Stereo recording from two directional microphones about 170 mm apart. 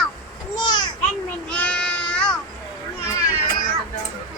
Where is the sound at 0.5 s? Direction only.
25° left (ahead or behind).